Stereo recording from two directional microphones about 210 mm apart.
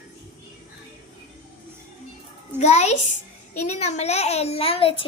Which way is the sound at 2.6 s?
30° left (ahead or behind).